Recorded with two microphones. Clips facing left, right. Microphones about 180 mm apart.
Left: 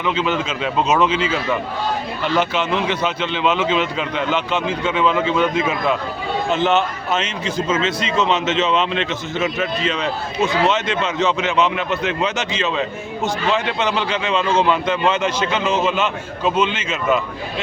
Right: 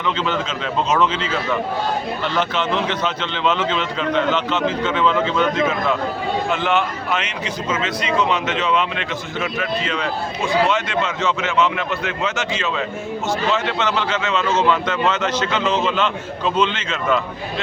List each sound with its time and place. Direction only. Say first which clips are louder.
0.0 s a man's voice: left 2 dB; 10° left (ahead or behind)
6.5 s a man's voice: left 5 dB; 25° left (ahead or behind)